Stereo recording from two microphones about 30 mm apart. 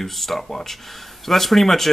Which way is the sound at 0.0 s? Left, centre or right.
Centre.